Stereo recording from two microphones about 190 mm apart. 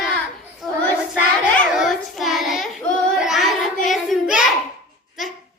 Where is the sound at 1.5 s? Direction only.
5° left (ahead or behind).